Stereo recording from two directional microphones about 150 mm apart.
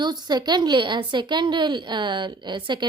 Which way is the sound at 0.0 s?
30° right (ahead or behind).